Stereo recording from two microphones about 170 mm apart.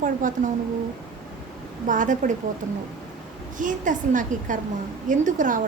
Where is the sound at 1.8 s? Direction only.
50° right (ahead or behind).